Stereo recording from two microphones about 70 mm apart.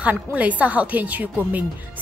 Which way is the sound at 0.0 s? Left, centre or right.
Right.